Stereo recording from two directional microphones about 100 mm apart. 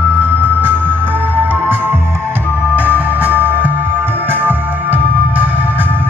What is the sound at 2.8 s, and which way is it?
Music, 15° right (ahead or behind).